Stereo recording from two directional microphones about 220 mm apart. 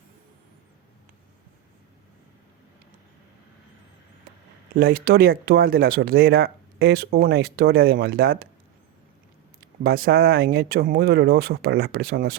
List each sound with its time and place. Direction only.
4.7 s speech: 40° right (ahead or behind)
9.8 s speech: 45° right (ahead or behind)